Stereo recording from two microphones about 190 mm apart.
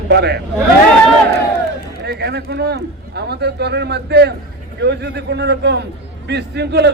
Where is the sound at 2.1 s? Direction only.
60° right (ahead or behind).